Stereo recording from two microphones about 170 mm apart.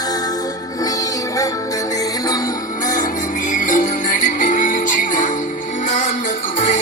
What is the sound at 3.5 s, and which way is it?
Music, 50° left (ahead or behind).